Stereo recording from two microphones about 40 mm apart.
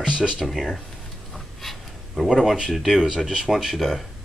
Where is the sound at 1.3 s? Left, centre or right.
Centre.